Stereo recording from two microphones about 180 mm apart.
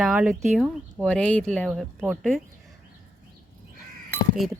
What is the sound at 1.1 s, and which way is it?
Speech, 5° left (ahead or behind).